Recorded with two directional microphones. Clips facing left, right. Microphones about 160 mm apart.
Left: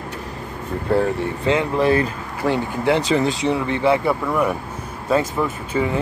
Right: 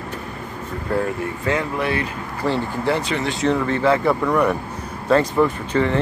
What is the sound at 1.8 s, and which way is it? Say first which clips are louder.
Speech: left 6 dB; 35° left (ahead or behind).